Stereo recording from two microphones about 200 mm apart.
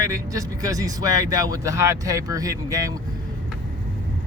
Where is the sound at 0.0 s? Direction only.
15° right (ahead or behind).